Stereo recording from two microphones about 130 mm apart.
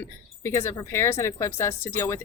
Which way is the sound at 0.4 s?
20° left (ahead or behind).